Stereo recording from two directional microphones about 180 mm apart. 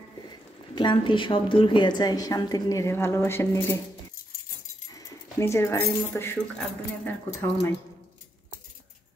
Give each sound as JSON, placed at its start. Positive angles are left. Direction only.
{"t": 0.3, "sound": "speech", "side_deg": 25}
{"t": 4.9, "sound": "keys jangling", "side_deg": 15}
{"t": 6.0, "sound": "speech", "side_deg": 15}